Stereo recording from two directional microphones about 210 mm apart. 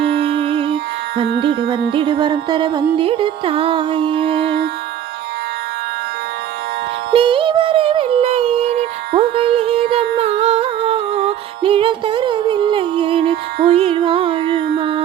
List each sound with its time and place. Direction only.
0.1 s music: 25° right (ahead or behind)
7.1 s music: 25° right (ahead or behind)
14.8 s a sound: 25° right (ahead or behind)